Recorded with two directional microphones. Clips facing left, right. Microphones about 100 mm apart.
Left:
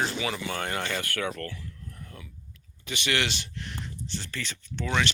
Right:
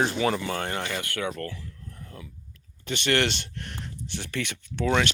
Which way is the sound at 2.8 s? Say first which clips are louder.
Right 4 dB; 50° right (ahead or behind).